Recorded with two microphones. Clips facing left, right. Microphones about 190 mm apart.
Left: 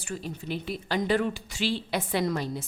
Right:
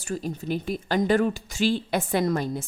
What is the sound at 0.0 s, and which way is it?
A woman's voice, 40° right (ahead or behind).